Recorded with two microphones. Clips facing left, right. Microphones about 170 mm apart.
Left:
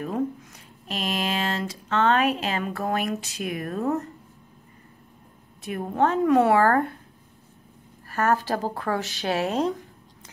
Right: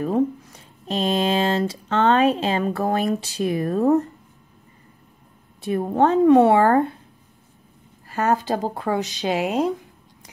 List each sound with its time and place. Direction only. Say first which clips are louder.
0.8 s speech: right 7 dB; 30° right (ahead or behind)
5.6 s speech: right 5 dB; 30° right (ahead or behind)
8.1 s speech: right 2 dB; 20° right (ahead or behind)